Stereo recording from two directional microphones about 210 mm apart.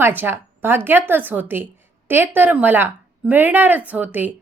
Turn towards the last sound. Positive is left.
turn(degrees=-10)  # may be behind; listen again after turning